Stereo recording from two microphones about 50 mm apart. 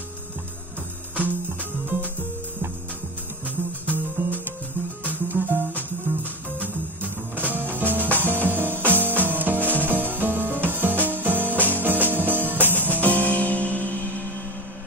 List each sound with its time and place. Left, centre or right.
1.1 s music: right
3.4 s music: right
13.0 s music: left